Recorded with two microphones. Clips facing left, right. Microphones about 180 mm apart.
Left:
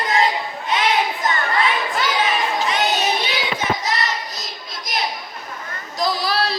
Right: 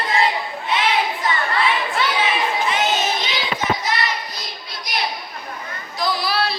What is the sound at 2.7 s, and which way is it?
Child singing, 35° left (ahead or behind).